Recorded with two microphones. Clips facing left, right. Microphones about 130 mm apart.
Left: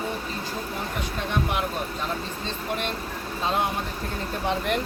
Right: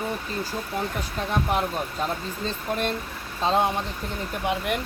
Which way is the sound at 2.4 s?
40° right (ahead or behind).